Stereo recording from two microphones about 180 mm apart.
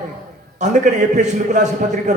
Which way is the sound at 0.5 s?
45° right (ahead or behind).